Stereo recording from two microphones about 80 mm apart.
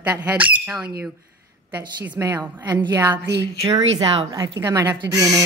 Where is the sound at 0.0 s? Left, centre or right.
Centre.